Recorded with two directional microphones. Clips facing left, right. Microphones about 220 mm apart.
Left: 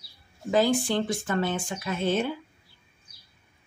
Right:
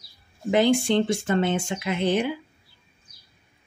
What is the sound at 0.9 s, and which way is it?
Speech, 25° right (ahead or behind).